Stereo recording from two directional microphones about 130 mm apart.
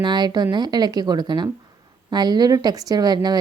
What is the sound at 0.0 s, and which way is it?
A woman's voice, 35° right (ahead or behind).